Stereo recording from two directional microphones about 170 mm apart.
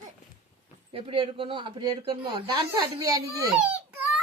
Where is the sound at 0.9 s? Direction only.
30° right (ahead or behind).